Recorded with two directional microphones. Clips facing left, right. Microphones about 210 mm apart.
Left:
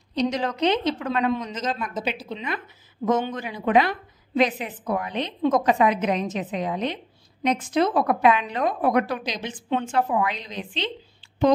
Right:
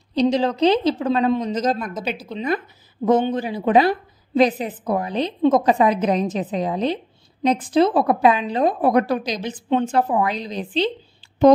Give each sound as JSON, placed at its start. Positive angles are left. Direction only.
{"t": 0.1, "sound": "a woman's voice", "side_deg": -30}